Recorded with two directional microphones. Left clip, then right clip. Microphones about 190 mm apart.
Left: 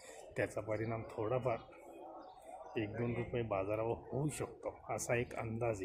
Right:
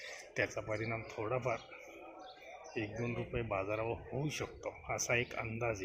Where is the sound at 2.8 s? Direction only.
10° left (ahead or behind).